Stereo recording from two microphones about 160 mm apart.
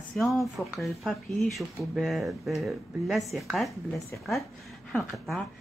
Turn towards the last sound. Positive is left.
turn(degrees=0)  # may be behind; listen again after turning